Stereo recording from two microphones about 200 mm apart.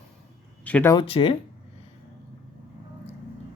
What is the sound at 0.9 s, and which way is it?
Speech, 25° left (ahead or behind).